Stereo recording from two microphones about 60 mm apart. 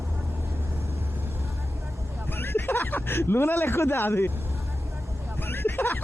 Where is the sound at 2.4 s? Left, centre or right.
Left.